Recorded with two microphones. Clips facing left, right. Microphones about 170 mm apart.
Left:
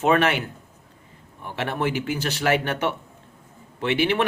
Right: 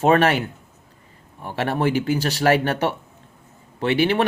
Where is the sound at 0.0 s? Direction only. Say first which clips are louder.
Right 3 dB; 35° right (ahead or behind).